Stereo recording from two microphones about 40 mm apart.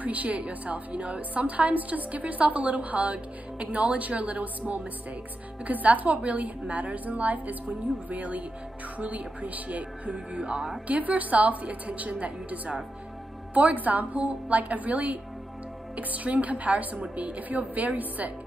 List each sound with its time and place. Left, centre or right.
0.0 s a woman's voice: right
10.9 s a woman's voice: right